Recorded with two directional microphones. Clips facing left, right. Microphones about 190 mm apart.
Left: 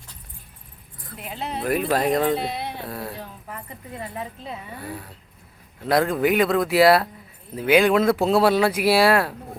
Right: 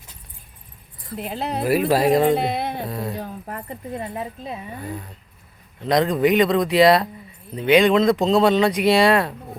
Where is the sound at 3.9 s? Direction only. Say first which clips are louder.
Right 3 dB; 20° right (ahead or behind).